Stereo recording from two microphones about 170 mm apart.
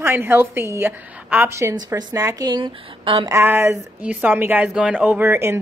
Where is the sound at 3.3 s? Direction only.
15° right (ahead or behind).